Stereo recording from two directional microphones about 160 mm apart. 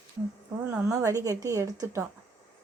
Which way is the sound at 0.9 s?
20° right (ahead or behind).